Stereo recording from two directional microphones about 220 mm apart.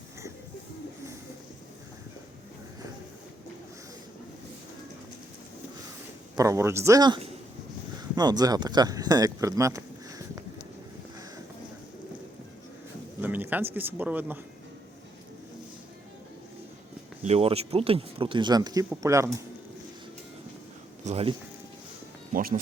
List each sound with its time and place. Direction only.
6.3 s speech: 15° right (ahead or behind)
13.2 s speech: 10° right (ahead or behind)
17.2 s speech: 30° right (ahead or behind)
21.0 s speech: 30° right (ahead or behind)
22.3 s speech: 40° right (ahead or behind)